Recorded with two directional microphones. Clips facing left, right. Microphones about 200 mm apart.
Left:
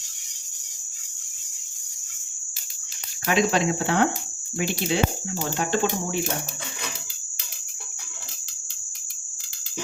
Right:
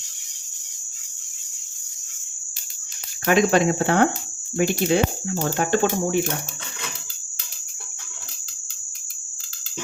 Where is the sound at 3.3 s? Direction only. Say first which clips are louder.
Right 4 dB; 50° right (ahead or behind).